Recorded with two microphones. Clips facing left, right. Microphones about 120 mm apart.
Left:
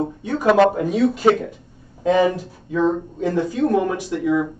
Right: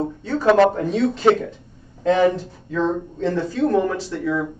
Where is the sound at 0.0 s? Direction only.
15° left (ahead or behind).